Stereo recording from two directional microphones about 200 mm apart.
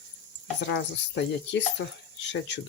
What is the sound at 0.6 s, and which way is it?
Speech, 60° left (ahead or behind).